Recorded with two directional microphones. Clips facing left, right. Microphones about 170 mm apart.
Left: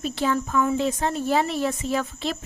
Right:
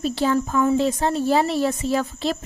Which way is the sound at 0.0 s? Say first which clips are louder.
Right 4 dB; 35° right (ahead or behind).